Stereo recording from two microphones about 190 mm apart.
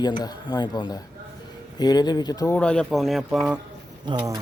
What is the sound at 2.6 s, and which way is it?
Speech, 5° left (ahead or behind).